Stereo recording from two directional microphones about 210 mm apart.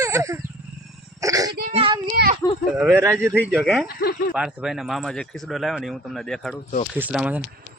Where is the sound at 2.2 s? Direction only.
55° right (ahead or behind).